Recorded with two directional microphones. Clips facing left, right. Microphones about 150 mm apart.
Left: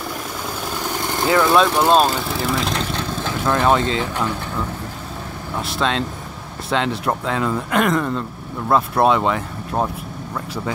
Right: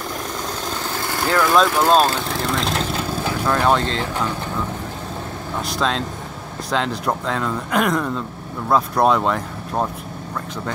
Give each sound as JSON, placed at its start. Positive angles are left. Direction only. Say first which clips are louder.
{"t": 0.8, "sound": "vehicle", "louder": "left 3 dB", "side_deg": 20}
{"t": 1.5, "sound": "speech", "louder": "right 1 dB", "side_deg": 5}
{"t": 5.6, "sound": "speech", "louder": "left 1 dB", "side_deg": 0}